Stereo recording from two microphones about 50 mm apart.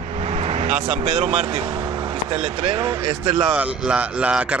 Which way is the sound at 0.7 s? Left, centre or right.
Centre.